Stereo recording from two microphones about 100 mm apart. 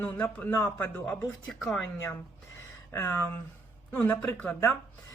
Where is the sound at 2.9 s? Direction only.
25° left (ahead or behind).